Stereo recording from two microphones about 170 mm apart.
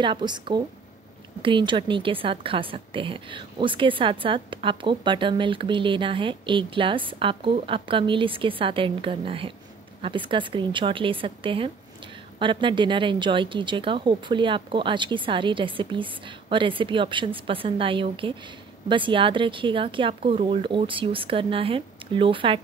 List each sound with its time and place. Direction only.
0.0 s a woman's voice: 25° right (ahead or behind)